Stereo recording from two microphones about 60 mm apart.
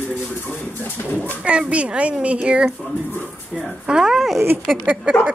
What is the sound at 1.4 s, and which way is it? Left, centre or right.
Speech, right.